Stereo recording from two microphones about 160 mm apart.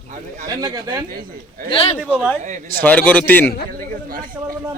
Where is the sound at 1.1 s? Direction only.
65° right (ahead or behind).